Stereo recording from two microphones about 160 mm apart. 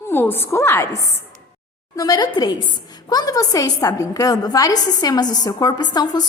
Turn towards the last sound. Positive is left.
turn(degrees=25)  # may be behind; listen again after turning